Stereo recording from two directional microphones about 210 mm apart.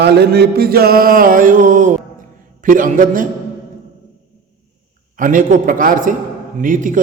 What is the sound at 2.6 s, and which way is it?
Speech, 40° right (ahead or behind).